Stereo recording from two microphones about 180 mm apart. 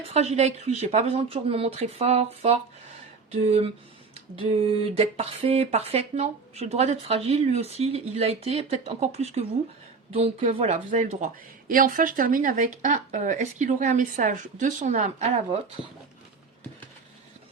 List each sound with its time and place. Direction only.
0.1 s speech: 35° right (ahead or behind)